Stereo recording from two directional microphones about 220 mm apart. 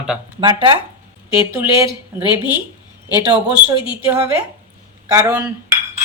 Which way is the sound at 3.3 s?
5° right (ahead or behind).